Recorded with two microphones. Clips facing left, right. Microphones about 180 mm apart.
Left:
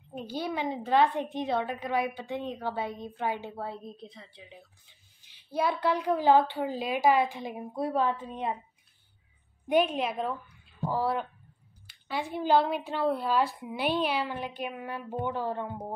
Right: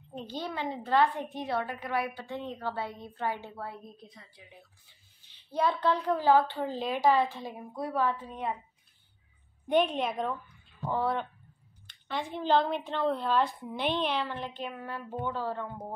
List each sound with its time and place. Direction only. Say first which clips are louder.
0.1 s a woman's voice: left 3 dB; 10° left (ahead or behind)
9.7 s a woman's voice: left 1 dB; 5° left (ahead or behind)